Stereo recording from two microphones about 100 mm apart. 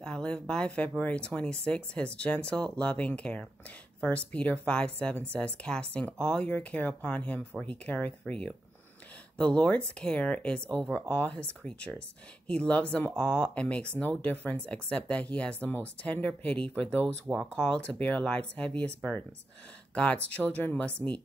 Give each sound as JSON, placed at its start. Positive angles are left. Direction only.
{"t": 0.0, "sound": "speech", "side_deg": 10}
{"t": 19.9, "sound": "speech", "side_deg": 10}